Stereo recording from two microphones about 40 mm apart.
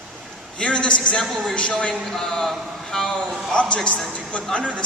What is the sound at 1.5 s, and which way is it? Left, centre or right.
Speech, left.